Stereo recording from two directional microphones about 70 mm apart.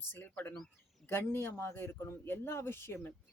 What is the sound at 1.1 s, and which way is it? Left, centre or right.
Speech, left.